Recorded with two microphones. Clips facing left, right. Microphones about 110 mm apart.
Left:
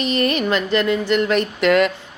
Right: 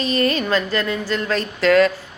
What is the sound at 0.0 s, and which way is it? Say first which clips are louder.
Speech: even; 20° left (ahead or behind).